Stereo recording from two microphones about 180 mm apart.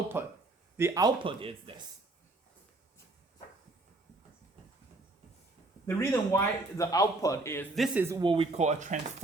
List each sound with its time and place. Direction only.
0.1 s speech: 15° right (ahead or behind); by 1.7 s 30° right (ahead or behind)
5.8 s a man's voice: 15° left (ahead or behind)
7.8 s speech: 10° right (ahead or behind)
8.2 s speech: 30° right (ahead or behind)